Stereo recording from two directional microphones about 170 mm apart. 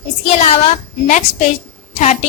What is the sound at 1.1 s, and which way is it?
A woman's voice, 45° left (ahead or behind).